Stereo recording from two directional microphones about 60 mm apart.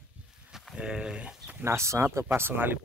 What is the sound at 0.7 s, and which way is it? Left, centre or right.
Speech, centre.